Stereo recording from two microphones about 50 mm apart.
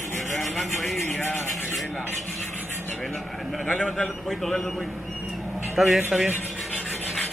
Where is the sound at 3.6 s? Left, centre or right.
Centre.